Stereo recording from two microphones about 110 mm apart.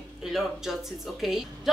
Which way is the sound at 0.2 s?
5° right (ahead or behind).